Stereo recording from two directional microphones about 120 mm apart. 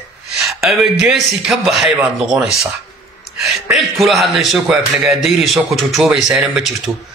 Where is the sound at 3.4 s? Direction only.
Centre (ahead or behind).